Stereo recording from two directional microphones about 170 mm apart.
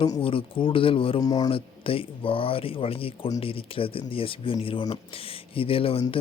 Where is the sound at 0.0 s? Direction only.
30° left (ahead or behind).